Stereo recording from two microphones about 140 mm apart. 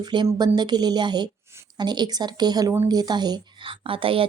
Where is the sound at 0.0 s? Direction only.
35° right (ahead or behind).